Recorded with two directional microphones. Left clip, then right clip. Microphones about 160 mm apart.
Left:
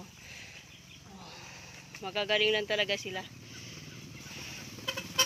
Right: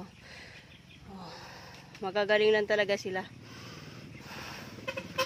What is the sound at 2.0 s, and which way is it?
Speech, 45° right (ahead or behind).